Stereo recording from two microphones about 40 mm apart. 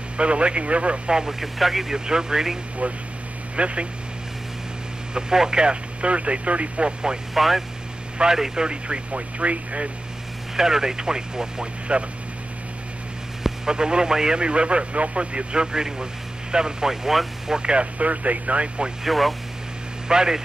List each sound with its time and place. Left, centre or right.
0.2 s speech: right
1.4 s speech: centre
2.0 s speech: centre
2.8 s speech: right
5.1 s speech: centre; by 6.9 s right
7.3 s speech: centre
8.2 s speech: centre; by 9.8 s right
10.5 s speech: centre
13.4 s speech: centre
15.6 s speech: centre
17.6 s speech: right
19.0 s speech: centre
20.1 s speech: centre